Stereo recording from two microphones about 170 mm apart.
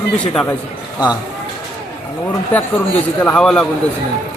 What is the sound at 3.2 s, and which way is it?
Speech, 5° left (ahead or behind).